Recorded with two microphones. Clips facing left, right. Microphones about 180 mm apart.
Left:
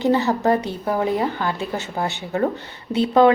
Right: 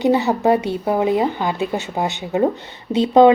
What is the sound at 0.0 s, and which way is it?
Speech, 15° right (ahead or behind).